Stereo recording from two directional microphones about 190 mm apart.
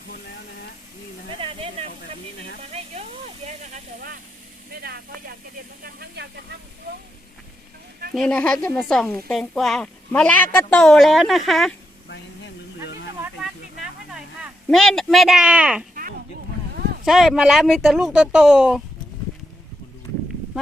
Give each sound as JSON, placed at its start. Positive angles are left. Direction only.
{"t": 1.4, "sound": "a sound", "side_deg": -30}
{"t": 4.7, "sound": "speech", "side_deg": -55}
{"t": 8.1, "sound": "speech", "side_deg": 5}
{"t": 14.1, "sound": "speech", "side_deg": 0}
{"t": 17.1, "sound": "speech", "side_deg": 0}